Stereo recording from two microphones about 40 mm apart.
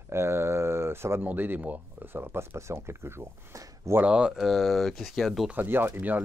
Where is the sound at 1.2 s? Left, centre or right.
Right.